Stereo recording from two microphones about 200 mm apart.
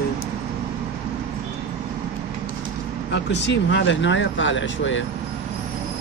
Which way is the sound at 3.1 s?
60° left (ahead or behind).